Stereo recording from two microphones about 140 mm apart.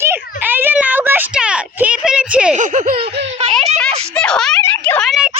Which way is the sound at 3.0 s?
40° right (ahead or behind).